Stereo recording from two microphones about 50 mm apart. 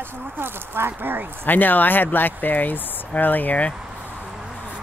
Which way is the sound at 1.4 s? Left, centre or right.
Left.